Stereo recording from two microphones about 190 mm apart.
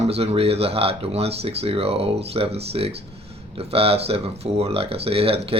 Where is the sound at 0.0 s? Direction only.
35° right (ahead or behind).